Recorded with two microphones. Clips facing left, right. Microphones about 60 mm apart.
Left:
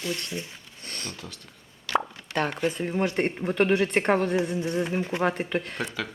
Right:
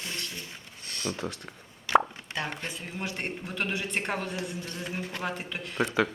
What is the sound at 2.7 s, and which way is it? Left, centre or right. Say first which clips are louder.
Speech: left 9 dB; left.